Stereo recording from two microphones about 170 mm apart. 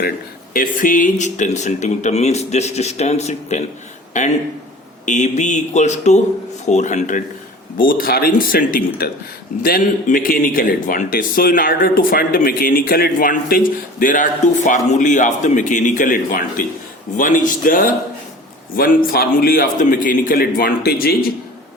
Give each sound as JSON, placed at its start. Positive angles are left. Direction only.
{"t": 0.5, "sound": "speech", "side_deg": 55}
{"t": 7.8, "sound": "a man's voice", "side_deg": 55}